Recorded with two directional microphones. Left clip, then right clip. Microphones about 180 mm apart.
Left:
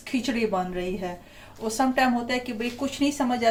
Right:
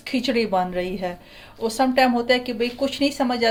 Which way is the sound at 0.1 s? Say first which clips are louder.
Right 5 dB; 55° right (ahead or behind).